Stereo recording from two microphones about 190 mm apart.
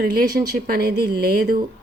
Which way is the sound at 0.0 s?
50° right (ahead or behind).